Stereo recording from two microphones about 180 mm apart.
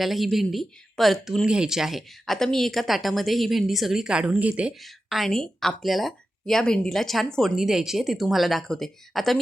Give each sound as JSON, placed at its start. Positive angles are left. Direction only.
{"t": 0.0, "sound": "speech", "side_deg": 0}